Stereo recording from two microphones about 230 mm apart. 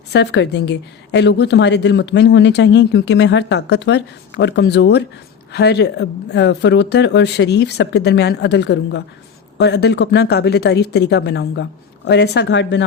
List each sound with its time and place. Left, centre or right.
0.1 s a woman's voice: left